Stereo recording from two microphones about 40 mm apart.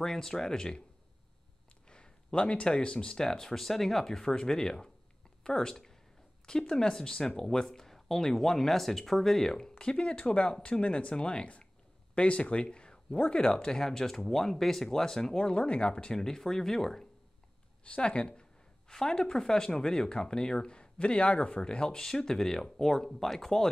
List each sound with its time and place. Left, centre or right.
0.0 s speech: centre
1.9 s speech: left
15.4 s speech: left
16.2 s speech: centre
17.8 s a sound: left
18.9 s speech: centre